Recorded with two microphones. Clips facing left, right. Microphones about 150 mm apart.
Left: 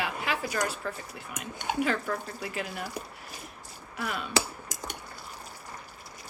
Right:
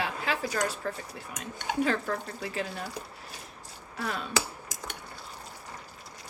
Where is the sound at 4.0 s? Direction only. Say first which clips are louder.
Even; 35° right (ahead or behind).